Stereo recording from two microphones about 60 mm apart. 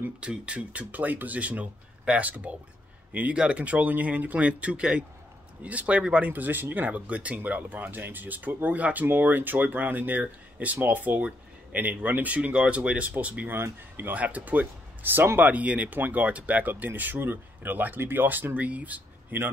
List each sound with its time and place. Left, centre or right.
0.2 s speech: centre
13.5 s speech: right